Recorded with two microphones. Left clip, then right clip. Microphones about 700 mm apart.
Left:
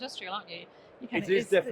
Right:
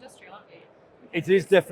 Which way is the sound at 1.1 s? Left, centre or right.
Right.